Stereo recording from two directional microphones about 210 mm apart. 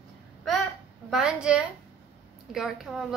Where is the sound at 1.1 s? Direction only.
5° right (ahead or behind).